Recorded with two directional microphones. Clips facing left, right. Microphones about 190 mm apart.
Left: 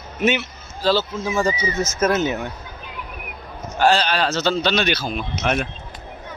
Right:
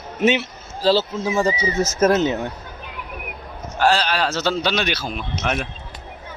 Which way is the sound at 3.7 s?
Centre (ahead or behind).